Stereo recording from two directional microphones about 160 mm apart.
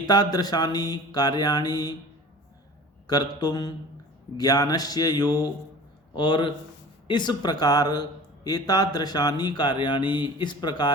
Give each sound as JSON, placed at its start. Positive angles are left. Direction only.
{"t": 0.0, "sound": "speech", "side_deg": 25}
{"t": 3.1, "sound": "speech", "side_deg": 25}